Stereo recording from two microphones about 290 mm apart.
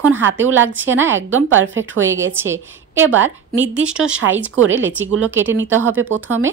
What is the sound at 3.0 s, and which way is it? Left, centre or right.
Speech, right.